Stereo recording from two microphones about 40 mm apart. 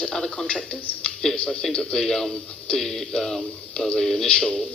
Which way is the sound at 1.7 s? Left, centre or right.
Centre.